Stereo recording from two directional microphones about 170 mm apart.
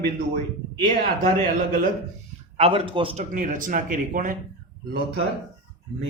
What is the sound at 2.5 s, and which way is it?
A man's voice, 35° right (ahead or behind).